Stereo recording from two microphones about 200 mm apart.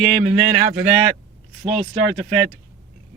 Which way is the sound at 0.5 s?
50° right (ahead or behind).